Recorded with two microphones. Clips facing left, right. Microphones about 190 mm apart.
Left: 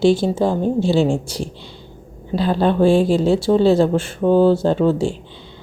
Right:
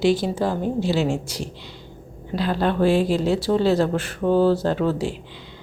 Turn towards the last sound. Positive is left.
turn(degrees=25)  # may be behind; listen again after turning